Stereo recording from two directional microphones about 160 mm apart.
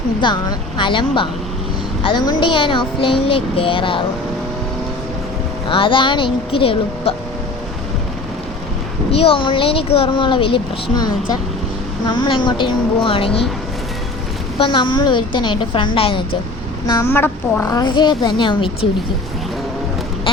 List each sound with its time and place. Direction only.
0.2 s speech: 30° left (ahead or behind)
5.6 s speech: 30° left (ahead or behind)
9.1 s speech: 35° left (ahead or behind)
14.6 s a woman's voice: 30° left (ahead or behind)
16.8 s a woman's voice: 15° left (ahead or behind); by 18.9 s 30° left (ahead or behind)